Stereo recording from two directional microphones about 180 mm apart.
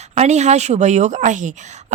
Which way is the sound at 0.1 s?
40° right (ahead or behind).